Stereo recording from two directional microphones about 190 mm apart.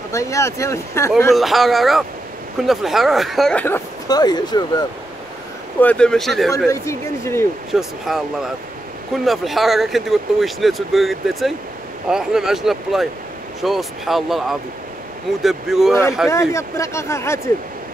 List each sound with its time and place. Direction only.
0.1 s speech: 15° left (ahead or behind)
1.3 s speech: centre (ahead or behind); by 4.8 s 20° left (ahead or behind)
5.8 s speech: 5° left (ahead or behind)
6.7 s speech: 15° left (ahead or behind)
7.7 s speech: centre (ahead or behind)
16.3 s speech: 15° left (ahead or behind)